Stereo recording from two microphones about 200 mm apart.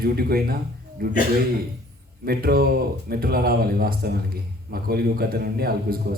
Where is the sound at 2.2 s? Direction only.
50° right (ahead or behind).